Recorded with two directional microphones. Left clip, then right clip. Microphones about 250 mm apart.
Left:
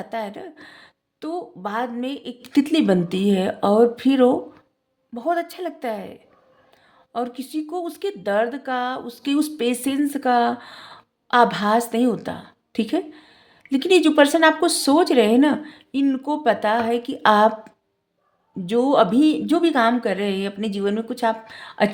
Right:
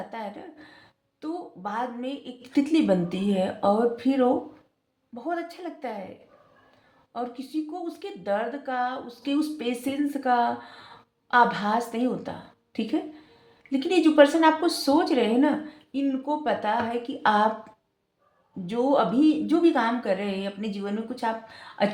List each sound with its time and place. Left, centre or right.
0.1 s speech: left
7.1 s speech: left
18.6 s speech: left